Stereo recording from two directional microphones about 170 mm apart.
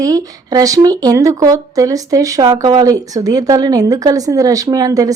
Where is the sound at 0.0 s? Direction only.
20° right (ahead or behind).